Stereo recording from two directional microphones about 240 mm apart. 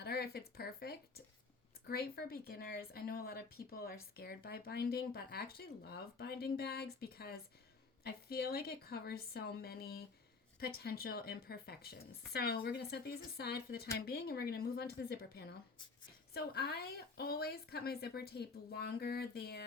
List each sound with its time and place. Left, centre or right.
0.0 s speech: left